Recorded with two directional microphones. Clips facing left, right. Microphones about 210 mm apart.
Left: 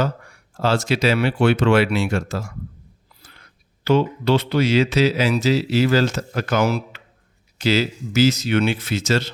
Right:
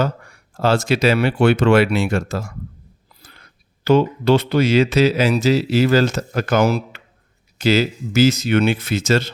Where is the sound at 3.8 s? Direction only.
45° right (ahead or behind).